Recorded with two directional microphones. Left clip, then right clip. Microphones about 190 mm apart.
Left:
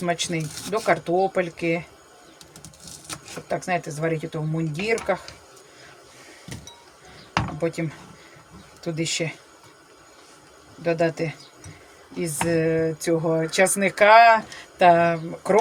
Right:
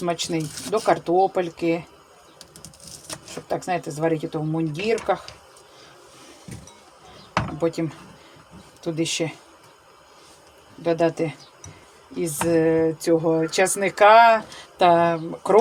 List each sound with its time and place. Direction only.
0.1 s speech: 20° right (ahead or behind)
3.5 s speech: 20° right (ahead or behind)
7.6 s speech: 20° right (ahead or behind)
10.8 s speech: 20° right (ahead or behind)